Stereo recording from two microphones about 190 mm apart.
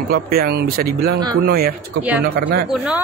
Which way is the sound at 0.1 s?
55° right (ahead or behind).